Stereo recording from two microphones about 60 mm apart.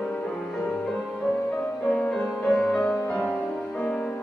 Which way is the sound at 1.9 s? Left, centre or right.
Centre.